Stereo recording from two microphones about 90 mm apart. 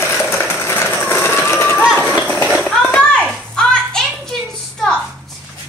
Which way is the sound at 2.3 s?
15° left (ahead or behind).